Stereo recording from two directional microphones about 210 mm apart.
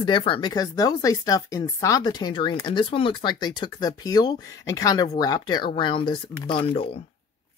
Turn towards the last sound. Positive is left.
turn(degrees=25)  # may be behind; listen again after turning